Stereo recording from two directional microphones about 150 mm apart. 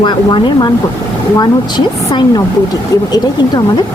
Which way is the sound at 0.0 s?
30° left (ahead or behind).